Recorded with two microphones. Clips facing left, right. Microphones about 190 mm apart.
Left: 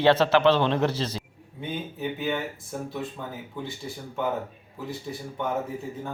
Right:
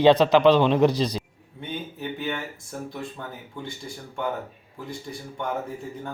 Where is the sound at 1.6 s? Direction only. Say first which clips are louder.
Left 2 dB; 5° left (ahead or behind).